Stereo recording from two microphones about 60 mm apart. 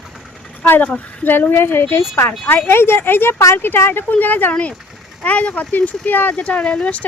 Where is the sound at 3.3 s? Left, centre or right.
Left.